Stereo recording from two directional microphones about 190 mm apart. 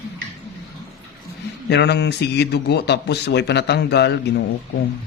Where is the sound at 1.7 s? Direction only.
60° left (ahead or behind).